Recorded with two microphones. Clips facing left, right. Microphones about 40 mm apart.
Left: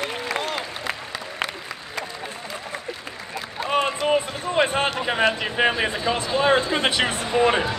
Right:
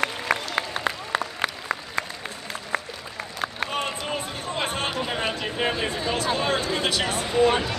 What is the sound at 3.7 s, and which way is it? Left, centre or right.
Run, left.